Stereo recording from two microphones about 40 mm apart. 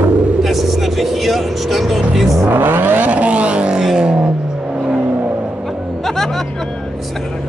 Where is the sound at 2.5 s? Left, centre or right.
Right.